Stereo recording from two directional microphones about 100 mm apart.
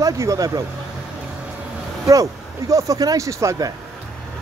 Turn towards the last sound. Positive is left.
turn(degrees=-35)  # may be behind; listen again after turning